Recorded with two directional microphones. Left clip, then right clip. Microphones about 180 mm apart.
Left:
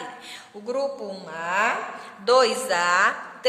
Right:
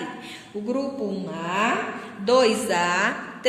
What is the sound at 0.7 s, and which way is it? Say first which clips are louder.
A woman's voice: left 1 dB; 60° left (ahead or behind).